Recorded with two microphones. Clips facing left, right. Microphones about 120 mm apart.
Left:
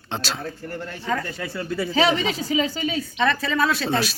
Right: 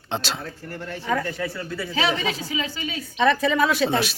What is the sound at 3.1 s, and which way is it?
Speech, 15° right (ahead or behind).